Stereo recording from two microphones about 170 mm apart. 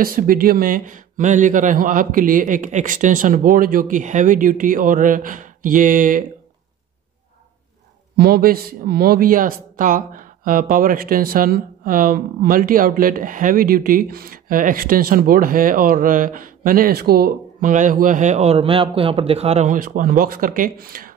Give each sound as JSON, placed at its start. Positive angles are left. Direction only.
{"t": 0.0, "sound": "speech", "side_deg": -60}
{"t": 8.2, "sound": "speech", "side_deg": -60}